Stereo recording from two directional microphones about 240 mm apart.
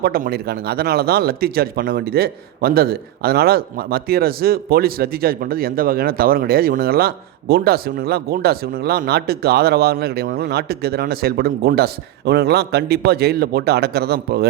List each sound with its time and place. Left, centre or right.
0.0 s speech: right